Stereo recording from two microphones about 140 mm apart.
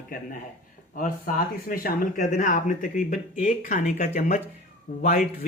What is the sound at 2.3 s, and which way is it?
Speech, 65° left (ahead or behind).